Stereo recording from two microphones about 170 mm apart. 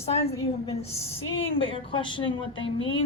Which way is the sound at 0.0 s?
35° left (ahead or behind).